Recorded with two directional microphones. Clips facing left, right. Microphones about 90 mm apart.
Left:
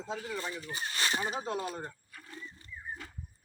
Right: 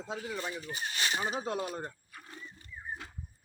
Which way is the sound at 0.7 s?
35° left (ahead or behind).